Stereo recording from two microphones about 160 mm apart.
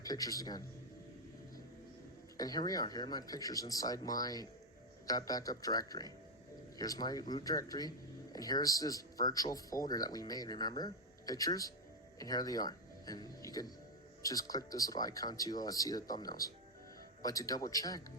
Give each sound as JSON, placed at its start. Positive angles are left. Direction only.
{"t": 0.0, "sound": "speech", "side_deg": 25}
{"t": 2.4, "sound": "speech", "side_deg": 25}